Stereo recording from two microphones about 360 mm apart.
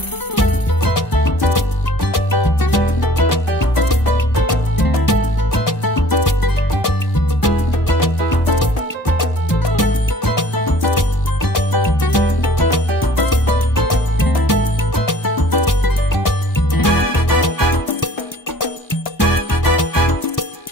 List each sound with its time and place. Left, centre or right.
0.4 s music: left
9.8 s music: left